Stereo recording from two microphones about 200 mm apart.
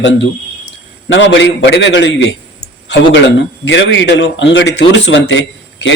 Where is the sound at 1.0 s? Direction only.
65° left (ahead or behind).